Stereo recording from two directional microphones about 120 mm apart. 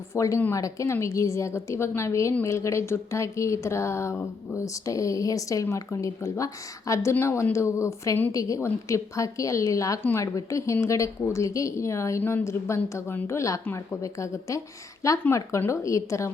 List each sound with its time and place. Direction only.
0.1 s speech: 25° left (ahead or behind)
10.0 s a woman's voice: 15° left (ahead or behind)
10.3 s a woman's voice: 25° left (ahead or behind)
14.0 s speech: 25° left (ahead or behind)